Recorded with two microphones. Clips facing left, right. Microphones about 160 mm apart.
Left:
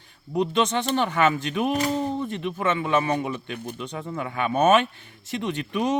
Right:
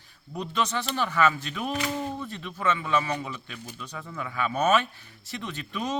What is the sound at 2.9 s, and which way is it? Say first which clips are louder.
A man's voice: left 4 dB; 50° left (ahead or behind).